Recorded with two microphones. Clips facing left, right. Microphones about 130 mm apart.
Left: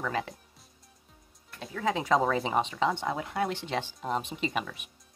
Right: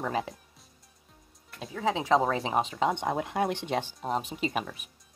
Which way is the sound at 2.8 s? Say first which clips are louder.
Right 1 dB; 20° right (ahead or behind).